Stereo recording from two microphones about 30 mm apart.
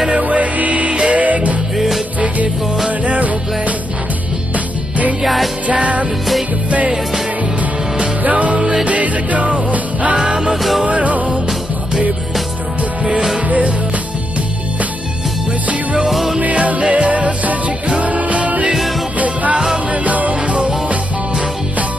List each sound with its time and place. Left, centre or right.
0.2 s music: right
3.1 s music: right
5.2 s music: centre
5.7 s music: right
8.2 s music: right
10.2 s music: right
10.5 s music: centre
10.9 s music: right
16.1 s music: centre
16.3 s music: right